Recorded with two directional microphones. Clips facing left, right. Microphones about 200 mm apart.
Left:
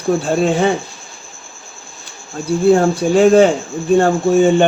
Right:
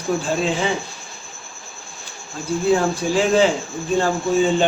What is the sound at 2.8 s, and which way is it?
Speech, 55° left (ahead or behind).